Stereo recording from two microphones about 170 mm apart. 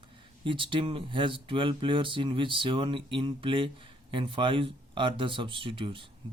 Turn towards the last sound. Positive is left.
turn(degrees=-30)  # may be behind; listen again after turning